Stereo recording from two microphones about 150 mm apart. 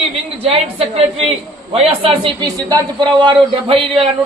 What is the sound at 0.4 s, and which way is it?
A man's voice, 40° right (ahead or behind).